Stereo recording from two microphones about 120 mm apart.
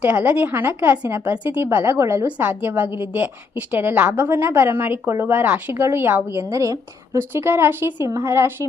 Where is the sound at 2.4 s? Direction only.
15° right (ahead or behind).